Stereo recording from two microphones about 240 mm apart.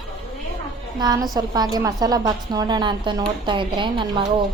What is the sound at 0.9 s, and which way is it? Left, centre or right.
A woman's voice, centre.